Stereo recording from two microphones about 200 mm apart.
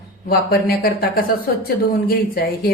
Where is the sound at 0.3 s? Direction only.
50° left (ahead or behind).